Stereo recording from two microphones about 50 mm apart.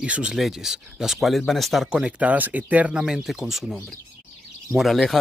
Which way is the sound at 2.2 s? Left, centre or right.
Right.